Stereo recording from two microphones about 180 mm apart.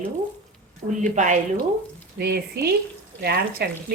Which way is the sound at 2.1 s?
60° right (ahead or behind).